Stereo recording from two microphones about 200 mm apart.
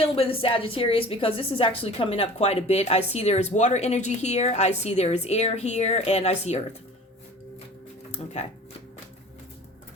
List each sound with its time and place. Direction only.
0.0 s a woman's voice: 30° left (ahead or behind)
8.1 s speech: 35° left (ahead or behind)